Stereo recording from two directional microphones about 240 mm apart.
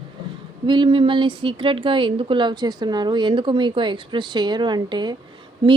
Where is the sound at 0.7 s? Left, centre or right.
Right.